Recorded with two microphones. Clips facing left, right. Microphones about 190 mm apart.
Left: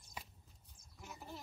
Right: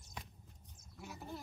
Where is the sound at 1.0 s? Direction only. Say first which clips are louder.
Right 4 dB; centre (ahead or behind).